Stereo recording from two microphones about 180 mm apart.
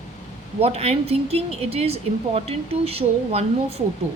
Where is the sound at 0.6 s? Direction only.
35° right (ahead or behind).